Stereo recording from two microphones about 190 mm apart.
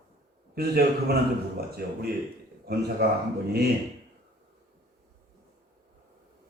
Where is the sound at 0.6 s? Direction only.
55° right (ahead or behind).